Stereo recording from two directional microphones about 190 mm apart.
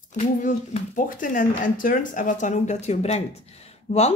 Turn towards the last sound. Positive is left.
turn(degrees=40)  # may be behind; listen again after turning